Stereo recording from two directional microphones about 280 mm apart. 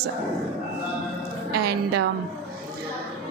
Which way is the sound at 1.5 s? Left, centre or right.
Right.